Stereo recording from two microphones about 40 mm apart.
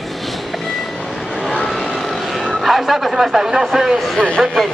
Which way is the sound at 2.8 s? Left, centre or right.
Centre.